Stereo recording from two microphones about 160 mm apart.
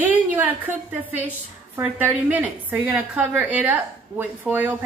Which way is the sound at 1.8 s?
10° right (ahead or behind).